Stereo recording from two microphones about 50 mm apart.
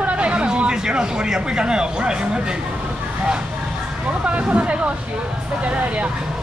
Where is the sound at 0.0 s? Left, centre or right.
Right.